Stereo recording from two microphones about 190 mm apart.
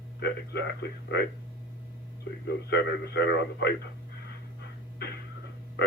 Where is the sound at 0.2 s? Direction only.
60° left (ahead or behind).